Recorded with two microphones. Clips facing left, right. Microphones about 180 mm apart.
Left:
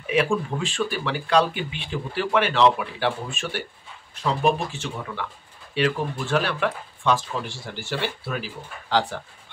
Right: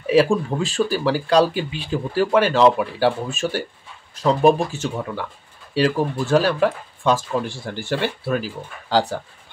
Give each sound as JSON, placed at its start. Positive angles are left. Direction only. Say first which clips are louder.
{"t": 0.0, "sound": "speech", "louder": "right 6 dB", "side_deg": -35}